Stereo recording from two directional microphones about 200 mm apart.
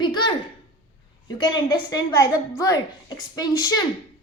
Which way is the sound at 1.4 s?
20° left (ahead or behind).